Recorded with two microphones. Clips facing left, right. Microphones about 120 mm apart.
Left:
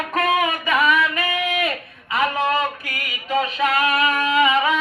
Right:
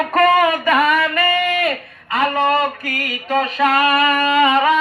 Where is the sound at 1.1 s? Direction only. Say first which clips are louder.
Right 6 dB; 60° right (ahead or behind).